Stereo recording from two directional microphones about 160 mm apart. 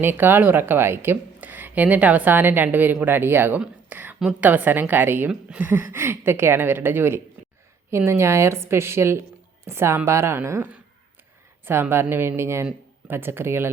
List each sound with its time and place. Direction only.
0.0 s a woman's voice: 15° right (ahead or behind)